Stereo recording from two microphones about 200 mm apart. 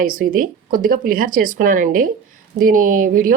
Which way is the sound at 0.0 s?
45° right (ahead or behind).